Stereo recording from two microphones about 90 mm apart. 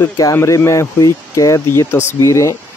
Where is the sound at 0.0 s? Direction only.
30° left (ahead or behind).